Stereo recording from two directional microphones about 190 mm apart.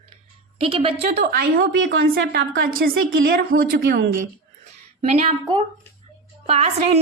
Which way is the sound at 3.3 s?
50° right (ahead or behind).